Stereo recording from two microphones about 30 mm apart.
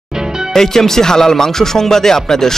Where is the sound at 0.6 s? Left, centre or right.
Centre.